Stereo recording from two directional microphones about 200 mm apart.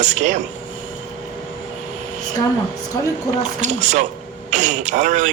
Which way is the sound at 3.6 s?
35° right (ahead or behind).